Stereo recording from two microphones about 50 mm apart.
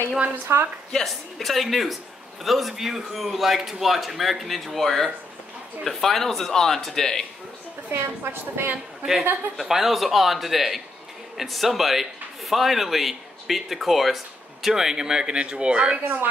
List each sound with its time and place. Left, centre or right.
0.5 s a woman's voice: right
0.9 s speech: centre
7.9 s a woman's voice: right
9.6 s speech: centre
16.0 s speech: right